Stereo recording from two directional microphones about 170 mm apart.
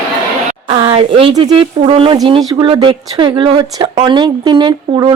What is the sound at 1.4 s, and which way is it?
Speech, 35° right (ahead or behind).